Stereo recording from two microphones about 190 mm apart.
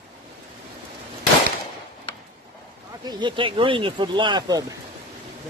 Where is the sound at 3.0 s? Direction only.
25° right (ahead or behind).